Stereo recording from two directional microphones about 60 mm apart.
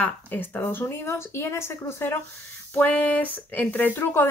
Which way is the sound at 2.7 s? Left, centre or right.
Left.